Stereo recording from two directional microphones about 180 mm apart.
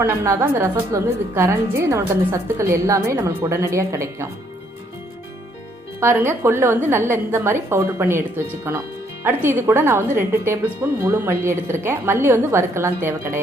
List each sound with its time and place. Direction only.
0.0 s a woman's voice: 15° right (ahead or behind)
6.0 s a woman's voice: 15° right (ahead or behind)